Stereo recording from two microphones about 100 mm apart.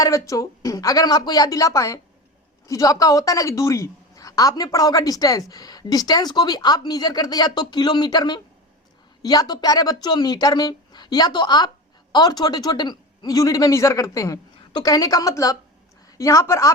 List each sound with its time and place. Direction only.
0.0 s a woman's voice: 35° left (ahead or behind)